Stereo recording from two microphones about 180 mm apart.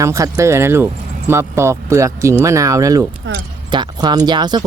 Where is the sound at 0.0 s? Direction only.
15° right (ahead or behind).